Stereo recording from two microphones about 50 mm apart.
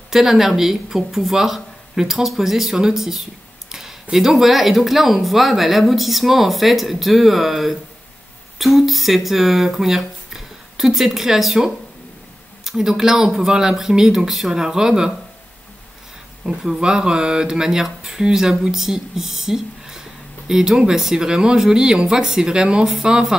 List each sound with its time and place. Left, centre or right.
0.1 s speech: centre
16.4 s speech: centre